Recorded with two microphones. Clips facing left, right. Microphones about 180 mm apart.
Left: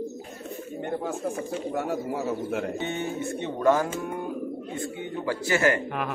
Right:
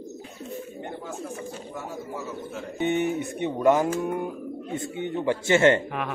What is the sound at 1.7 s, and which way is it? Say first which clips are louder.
Speech: left 7 dB; 65° left (ahead or behind).